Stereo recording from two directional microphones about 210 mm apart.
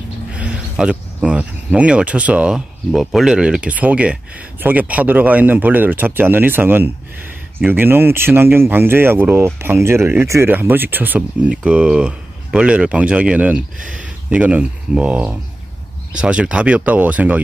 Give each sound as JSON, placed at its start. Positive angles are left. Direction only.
{"t": 0.3, "sound": "speech", "side_deg": -5}